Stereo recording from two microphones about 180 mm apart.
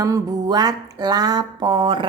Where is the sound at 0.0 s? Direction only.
20° right (ahead or behind).